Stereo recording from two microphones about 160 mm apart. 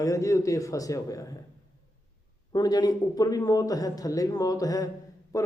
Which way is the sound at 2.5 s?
25° left (ahead or behind).